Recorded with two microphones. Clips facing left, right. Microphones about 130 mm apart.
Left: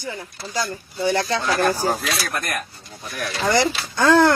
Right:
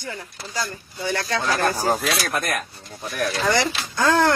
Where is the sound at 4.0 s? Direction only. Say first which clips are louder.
Left 3 dB; 20° left (ahead or behind).